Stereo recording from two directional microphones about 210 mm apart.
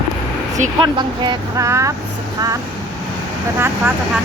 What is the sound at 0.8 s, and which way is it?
Speech, 20° right (ahead or behind).